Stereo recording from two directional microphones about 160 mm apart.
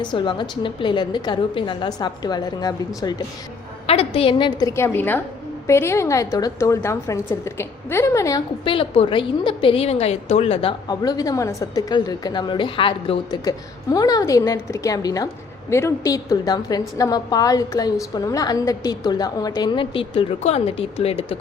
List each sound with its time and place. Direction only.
0.0 s a woman's voice: 30° left (ahead or behind)
3.8 s a woman's voice: 35° left (ahead or behind)
4.7 s a woman's voice: 15° left (ahead or behind)
8.6 s a woman's voice: 35° left (ahead or behind)